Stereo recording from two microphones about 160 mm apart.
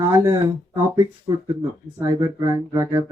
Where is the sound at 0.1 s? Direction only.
20° right (ahead or behind).